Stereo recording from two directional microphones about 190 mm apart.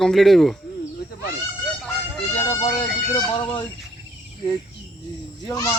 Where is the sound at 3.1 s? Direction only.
25° left (ahead or behind).